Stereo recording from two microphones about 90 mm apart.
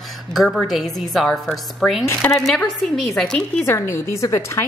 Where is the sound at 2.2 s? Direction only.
25° left (ahead or behind).